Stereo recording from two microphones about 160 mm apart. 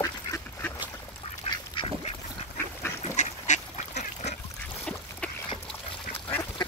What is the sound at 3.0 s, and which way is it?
Duck, 45° left (ahead or behind).